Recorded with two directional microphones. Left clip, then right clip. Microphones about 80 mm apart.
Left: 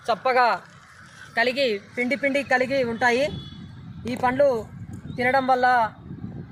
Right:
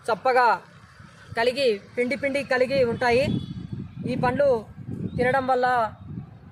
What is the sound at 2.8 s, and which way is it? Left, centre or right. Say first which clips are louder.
A man's voice: even; centre.